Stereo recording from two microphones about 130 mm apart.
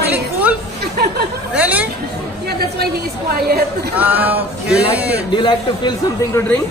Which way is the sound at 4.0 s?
15° right (ahead or behind).